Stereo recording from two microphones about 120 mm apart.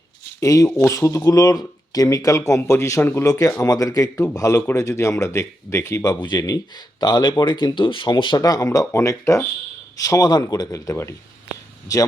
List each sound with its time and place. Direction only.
0.3 s speech: 25° left (ahead or behind)